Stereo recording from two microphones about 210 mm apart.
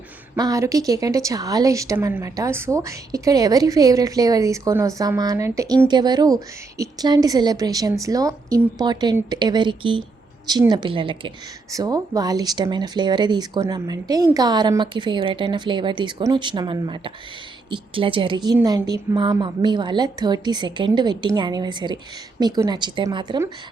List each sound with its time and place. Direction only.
0.3 s a woman's voice: 15° right (ahead or behind)